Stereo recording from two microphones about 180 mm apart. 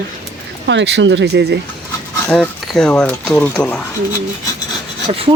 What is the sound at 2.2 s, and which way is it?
Speech, 5° left (ahead or behind).